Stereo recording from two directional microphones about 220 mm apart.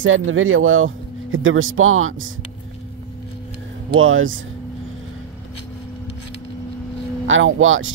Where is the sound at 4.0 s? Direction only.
65° right (ahead or behind).